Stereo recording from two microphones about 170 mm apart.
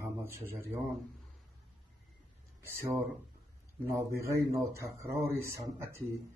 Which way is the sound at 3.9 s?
15° right (ahead or behind).